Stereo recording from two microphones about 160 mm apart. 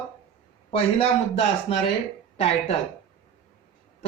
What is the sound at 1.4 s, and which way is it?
Speech, 35° left (ahead or behind).